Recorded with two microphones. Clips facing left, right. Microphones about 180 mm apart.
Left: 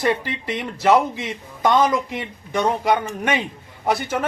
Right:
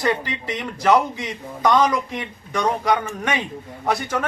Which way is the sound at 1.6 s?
25° left (ahead or behind).